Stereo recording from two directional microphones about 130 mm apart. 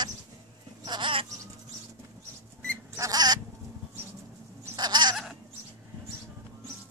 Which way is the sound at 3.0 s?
30° right (ahead or behind).